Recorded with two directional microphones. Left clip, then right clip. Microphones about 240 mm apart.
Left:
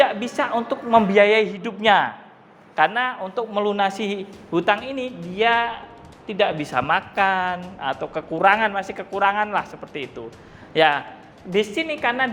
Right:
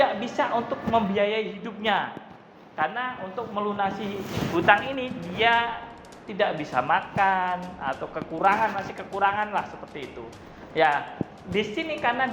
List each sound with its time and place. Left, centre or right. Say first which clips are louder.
0.0 s a woman's voice: left 4 dB; left